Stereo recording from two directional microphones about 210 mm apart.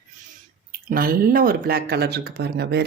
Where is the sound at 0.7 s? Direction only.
45° right (ahead or behind).